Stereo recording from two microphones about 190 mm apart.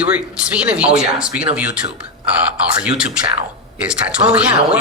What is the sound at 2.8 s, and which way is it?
Speech, 5° right (ahead or behind).